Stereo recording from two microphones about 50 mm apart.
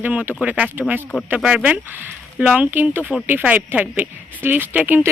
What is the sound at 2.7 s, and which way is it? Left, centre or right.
A woman's voice, right.